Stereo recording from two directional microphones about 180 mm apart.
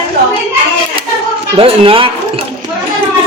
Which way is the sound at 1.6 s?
30° right (ahead or behind).